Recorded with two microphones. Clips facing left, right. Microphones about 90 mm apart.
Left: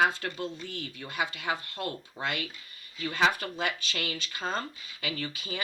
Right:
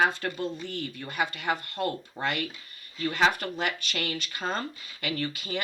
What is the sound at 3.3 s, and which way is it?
Speech, 60° right (ahead or behind).